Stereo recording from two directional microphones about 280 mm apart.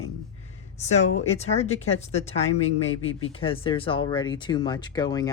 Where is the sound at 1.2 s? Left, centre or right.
Left.